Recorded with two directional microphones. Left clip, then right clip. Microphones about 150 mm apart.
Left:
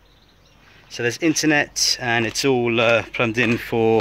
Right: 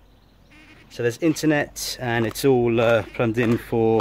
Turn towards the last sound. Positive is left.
turn(degrees=-10)  # may be behind; listen again after turning